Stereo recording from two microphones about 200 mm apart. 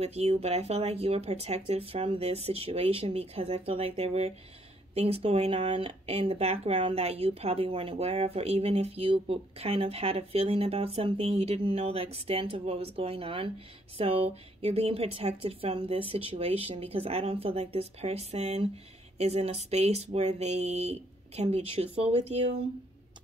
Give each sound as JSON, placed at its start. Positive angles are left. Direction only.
{"t": 0.0, "sound": "speech", "side_deg": -30}